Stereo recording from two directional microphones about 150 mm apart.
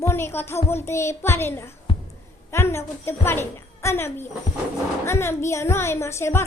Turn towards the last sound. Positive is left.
turn(degrees=15)  # may be behind; listen again after turning